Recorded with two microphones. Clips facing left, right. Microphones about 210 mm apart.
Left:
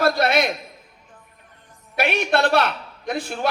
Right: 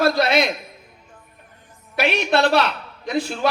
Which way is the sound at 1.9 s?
55° left (ahead or behind).